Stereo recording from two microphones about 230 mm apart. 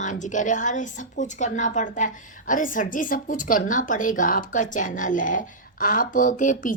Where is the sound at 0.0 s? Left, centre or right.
Left.